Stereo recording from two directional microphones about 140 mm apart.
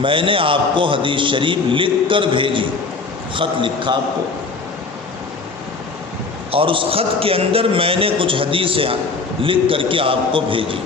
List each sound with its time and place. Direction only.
0.0 s a man's voice: 40° right (ahead or behind)
6.5 s a man's voice: 40° right (ahead or behind)